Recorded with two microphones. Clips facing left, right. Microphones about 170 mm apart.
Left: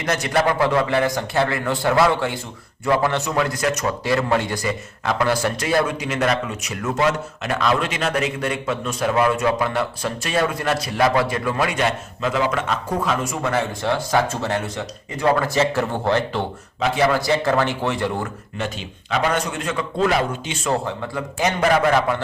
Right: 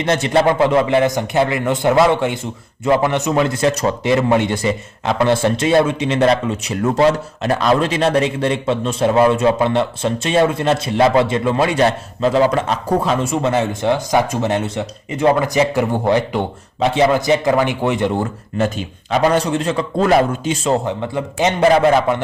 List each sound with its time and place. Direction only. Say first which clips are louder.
0.0 s a man's voice: right 5 dB; 25° right (ahead or behind)
18.5 s a man's voice: right 10 dB; 40° right (ahead or behind)
20.7 s a man's voice: right 3 dB; 20° right (ahead or behind)